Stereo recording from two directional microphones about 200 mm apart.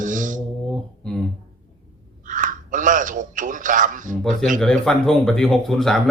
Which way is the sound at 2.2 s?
40° right (ahead or behind).